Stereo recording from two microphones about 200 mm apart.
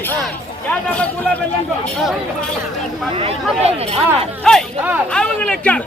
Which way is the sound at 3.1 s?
25° right (ahead or behind).